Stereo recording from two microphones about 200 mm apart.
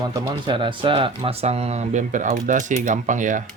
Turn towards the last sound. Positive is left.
turn(degrees=-40)  # may be behind; listen again after turning